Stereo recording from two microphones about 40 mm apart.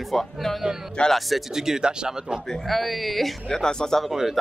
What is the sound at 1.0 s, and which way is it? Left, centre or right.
Speech, left.